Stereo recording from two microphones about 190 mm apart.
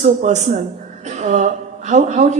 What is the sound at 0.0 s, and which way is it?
A man's voice, 40° right (ahead or behind).